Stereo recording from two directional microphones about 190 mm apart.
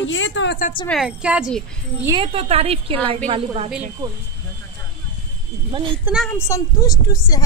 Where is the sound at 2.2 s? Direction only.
30° right (ahead or behind).